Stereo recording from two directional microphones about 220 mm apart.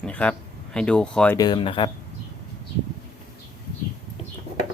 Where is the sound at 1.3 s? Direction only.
20° left (ahead or behind).